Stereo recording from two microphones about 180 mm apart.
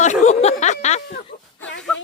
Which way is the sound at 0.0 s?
40° left (ahead or behind).